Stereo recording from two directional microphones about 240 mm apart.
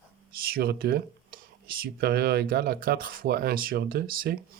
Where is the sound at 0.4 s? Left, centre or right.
Right.